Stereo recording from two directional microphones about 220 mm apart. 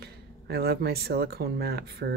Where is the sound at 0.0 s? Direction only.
45° right (ahead or behind).